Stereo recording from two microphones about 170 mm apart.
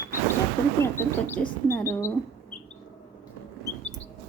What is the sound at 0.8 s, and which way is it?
Speech, 15° left (ahead or behind).